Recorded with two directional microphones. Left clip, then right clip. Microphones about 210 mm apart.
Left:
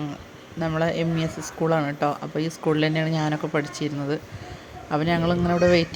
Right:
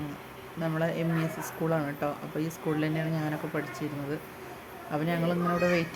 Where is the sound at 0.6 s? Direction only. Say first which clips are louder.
Left 6 dB; 20° left (ahead or behind).